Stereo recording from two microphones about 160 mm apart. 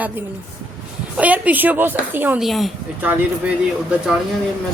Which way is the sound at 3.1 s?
10° right (ahead or behind).